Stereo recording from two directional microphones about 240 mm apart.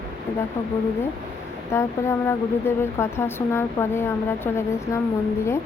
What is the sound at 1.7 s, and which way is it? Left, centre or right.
Speech, centre.